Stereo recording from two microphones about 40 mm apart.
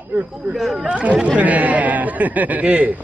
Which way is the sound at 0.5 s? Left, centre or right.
Centre.